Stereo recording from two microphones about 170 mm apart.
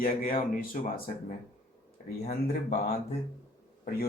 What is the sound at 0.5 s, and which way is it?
Speech, 55° left (ahead or behind).